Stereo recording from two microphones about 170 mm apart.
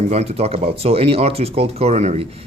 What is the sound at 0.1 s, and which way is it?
Speech, 40° right (ahead or behind).